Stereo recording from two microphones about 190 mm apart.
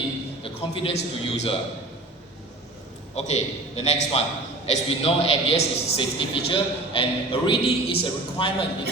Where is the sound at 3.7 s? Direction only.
35° left (ahead or behind).